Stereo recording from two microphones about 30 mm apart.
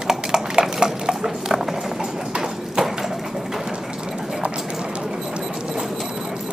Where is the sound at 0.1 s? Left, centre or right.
Centre.